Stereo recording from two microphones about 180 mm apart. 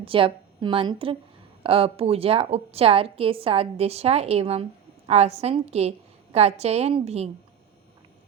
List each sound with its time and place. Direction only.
0.0 s a woman's voice: 30° right (ahead or behind)